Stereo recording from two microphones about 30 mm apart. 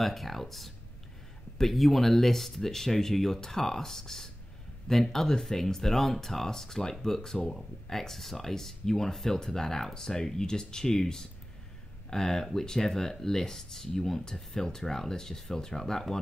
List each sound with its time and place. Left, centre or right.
0.0 s speech: centre